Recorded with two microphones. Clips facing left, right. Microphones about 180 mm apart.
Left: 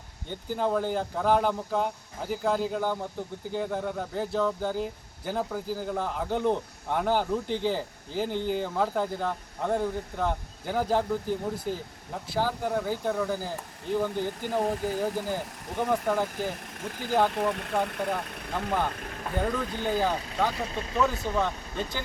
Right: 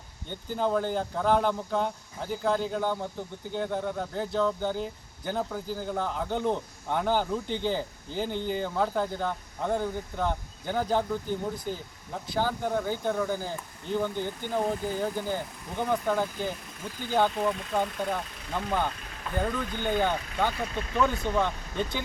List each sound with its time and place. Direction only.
0.3 s speech: centre (ahead or behind)
16.8 s speech: 80° left
17.3 s speech: 60° left (ahead or behind)
18.1 s speech: centre (ahead or behind)